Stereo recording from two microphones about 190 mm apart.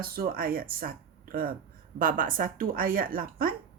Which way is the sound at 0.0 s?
50° right (ahead or behind).